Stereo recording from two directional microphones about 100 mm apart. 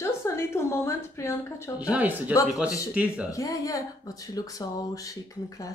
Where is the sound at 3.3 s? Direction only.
35° left (ahead or behind).